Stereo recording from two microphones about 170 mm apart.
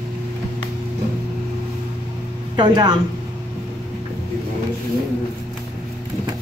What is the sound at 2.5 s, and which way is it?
Speech, 25° right (ahead or behind).